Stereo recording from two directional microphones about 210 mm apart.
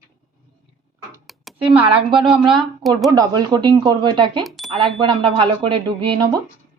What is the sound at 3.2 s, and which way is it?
Speech, 20° right (ahead or behind).